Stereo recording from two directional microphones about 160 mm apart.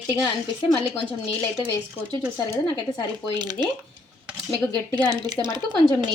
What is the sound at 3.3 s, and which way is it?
Speech, 25° right (ahead or behind).